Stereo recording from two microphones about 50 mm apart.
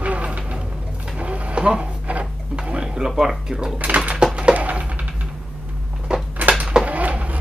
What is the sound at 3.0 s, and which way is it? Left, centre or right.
Speech, centre.